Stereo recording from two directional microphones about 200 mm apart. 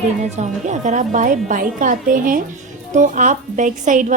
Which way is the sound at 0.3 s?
35° right (ahead or behind).